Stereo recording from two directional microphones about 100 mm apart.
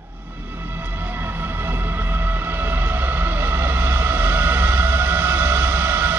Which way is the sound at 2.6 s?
20° right (ahead or behind).